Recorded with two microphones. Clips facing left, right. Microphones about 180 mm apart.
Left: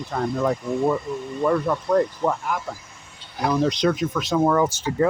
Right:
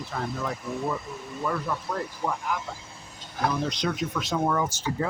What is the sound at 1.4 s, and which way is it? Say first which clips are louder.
Speech: left 8 dB; 50° left (ahead or behind).